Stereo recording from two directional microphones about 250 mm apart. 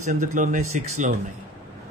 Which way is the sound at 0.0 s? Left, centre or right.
Right.